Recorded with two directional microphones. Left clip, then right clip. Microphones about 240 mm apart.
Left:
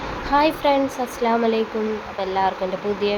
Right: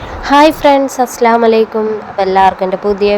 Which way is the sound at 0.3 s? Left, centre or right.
Right.